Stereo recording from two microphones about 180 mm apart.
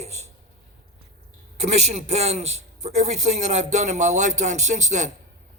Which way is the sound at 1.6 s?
40° right (ahead or behind).